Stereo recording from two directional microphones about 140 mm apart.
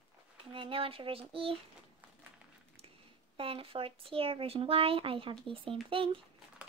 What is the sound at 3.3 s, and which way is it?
Speech, 40° right (ahead or behind).